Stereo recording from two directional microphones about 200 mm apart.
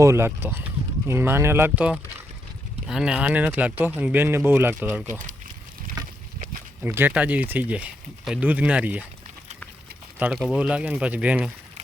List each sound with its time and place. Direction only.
0.0 s speech: 15° right (ahead or behind)
6.8 s speech: 10° right (ahead or behind)
10.2 s speech: 10° right (ahead or behind)